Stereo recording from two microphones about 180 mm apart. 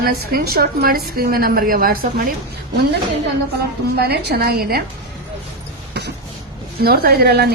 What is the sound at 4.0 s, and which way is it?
Speech, 65° right (ahead or behind).